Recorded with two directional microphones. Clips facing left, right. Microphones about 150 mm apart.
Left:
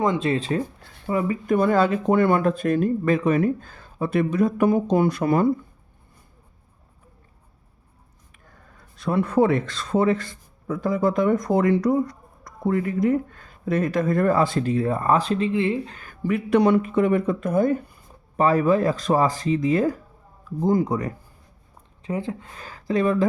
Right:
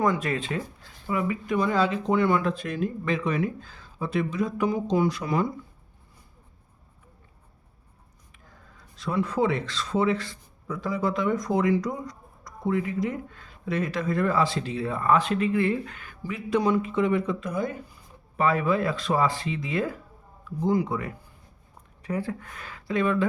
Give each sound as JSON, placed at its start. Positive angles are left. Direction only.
{"t": 0.0, "sound": "speech", "side_deg": 25}
{"t": 8.8, "sound": "speech", "side_deg": 55}
{"t": 15.9, "sound": "a sound", "side_deg": 40}
{"t": 16.2, "sound": "speech", "side_deg": 60}
{"t": 18.3, "sound": "speech", "side_deg": 40}
{"t": 22.0, "sound": "speech", "side_deg": 20}